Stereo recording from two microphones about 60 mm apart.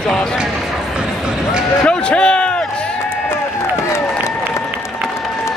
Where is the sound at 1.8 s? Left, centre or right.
Centre.